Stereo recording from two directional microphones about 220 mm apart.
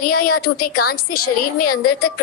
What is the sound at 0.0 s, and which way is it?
A woman's voice, 40° left (ahead or behind).